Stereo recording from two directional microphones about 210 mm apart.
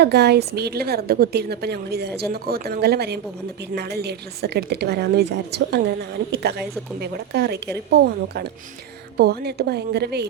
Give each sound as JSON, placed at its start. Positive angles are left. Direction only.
{"t": 0.0, "sound": "a woman's voice", "side_deg": -50}